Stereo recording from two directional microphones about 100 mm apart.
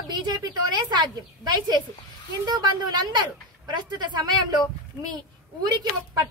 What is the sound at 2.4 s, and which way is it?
A woman's voice, 45° right (ahead or behind).